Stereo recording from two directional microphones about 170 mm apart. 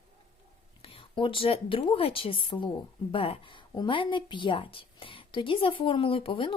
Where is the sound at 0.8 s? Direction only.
30° left (ahead or behind).